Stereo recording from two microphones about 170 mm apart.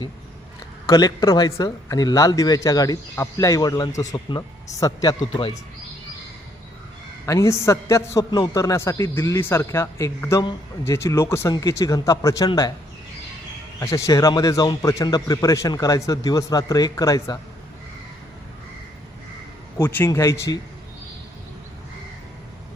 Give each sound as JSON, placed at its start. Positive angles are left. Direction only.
{"t": 0.9, "sound": "a man's voice", "side_deg": 25}
{"t": 7.3, "sound": "a man's voice", "side_deg": 15}
{"t": 13.7, "sound": "a man's voice", "side_deg": 15}
{"t": 19.8, "sound": "a man's voice", "side_deg": 15}